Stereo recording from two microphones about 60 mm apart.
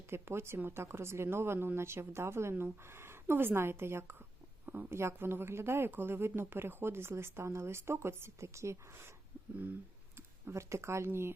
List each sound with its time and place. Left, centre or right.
0.1 s a woman's voice: right
10.5 s speech: right